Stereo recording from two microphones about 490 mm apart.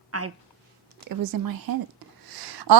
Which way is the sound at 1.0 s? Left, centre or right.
Right.